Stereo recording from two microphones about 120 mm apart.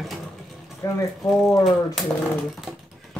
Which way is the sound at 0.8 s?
25° left (ahead or behind).